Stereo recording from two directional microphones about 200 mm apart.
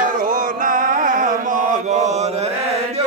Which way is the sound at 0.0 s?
40° right (ahead or behind).